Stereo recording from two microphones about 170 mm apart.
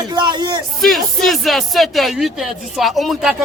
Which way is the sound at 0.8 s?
Centre (ahead or behind).